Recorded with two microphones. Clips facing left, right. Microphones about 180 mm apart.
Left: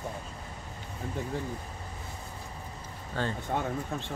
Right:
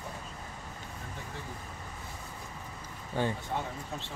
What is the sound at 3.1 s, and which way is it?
Speech, 15° right (ahead or behind).